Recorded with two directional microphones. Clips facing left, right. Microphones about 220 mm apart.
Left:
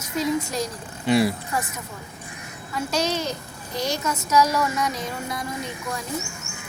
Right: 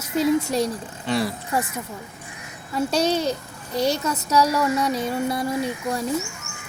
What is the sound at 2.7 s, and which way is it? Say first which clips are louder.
Speech: right 4 dB; 35° right (ahead or behind).